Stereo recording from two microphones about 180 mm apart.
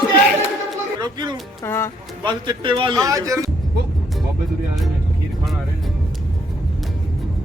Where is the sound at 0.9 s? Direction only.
25° right (ahead or behind).